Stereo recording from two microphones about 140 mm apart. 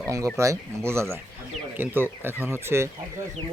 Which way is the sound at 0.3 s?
20° right (ahead or behind).